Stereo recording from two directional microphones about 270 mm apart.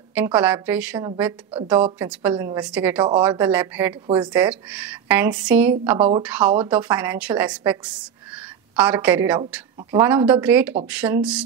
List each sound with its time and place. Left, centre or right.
0.1 s speech: centre
1.5 s a woman's voice: centre
2.0 s speech: centre
5.9 s a woman's voice: right
6.2 s speech: centre